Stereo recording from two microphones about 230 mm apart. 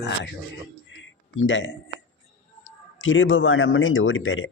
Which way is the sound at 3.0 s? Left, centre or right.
Left.